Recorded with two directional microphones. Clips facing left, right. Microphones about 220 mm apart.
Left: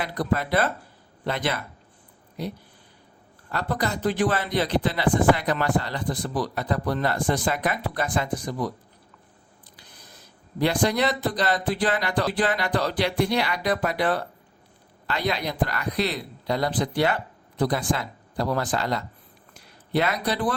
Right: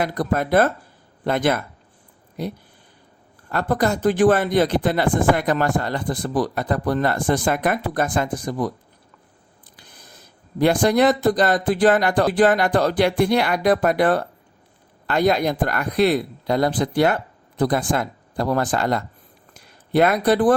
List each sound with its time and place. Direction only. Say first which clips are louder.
0.0 s speech: right 4 dB; 45° right (ahead or behind)
10.6 s speech: right 6 dB; 50° right (ahead or behind)